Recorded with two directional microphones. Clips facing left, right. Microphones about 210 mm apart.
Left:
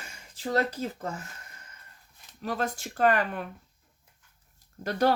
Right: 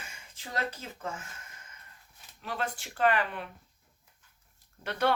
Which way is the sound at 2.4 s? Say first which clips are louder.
Left 5 dB; 40° left (ahead or behind).